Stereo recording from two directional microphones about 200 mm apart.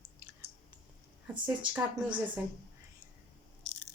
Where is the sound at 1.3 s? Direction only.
5° right (ahead or behind).